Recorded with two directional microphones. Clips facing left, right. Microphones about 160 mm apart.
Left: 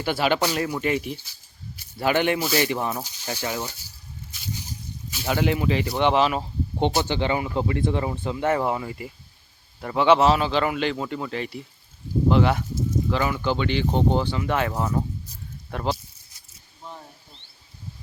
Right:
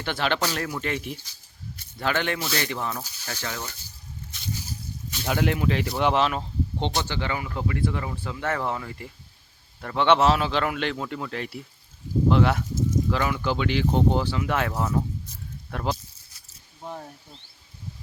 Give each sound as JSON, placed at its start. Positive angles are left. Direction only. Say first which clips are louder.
{"t": 0.0, "sound": "speech", "louder": "left 4 dB", "side_deg": 10}
{"t": 5.1, "sound": "speech", "louder": "left 2 dB", "side_deg": 5}
{"t": 7.0, "sound": "speech", "louder": "left 5 dB", "side_deg": 20}